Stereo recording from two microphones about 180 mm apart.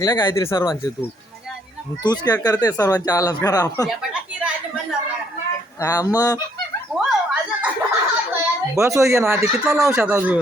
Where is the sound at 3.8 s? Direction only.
5° right (ahead or behind).